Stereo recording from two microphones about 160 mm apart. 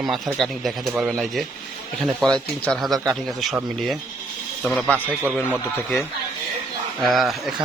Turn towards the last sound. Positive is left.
turn(degrees=0)  # may be behind; listen again after turning